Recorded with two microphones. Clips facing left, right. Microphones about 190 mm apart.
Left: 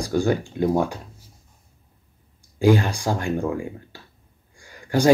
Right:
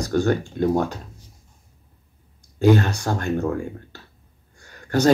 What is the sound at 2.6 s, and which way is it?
Speech, 10° left (ahead or behind).